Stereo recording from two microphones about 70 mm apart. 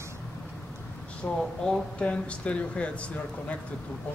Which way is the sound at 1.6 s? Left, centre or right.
Centre.